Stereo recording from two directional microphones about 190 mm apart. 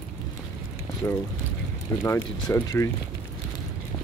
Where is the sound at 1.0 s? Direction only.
10° left (ahead or behind).